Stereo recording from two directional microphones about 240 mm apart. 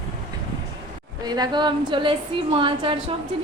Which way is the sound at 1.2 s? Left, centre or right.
Centre.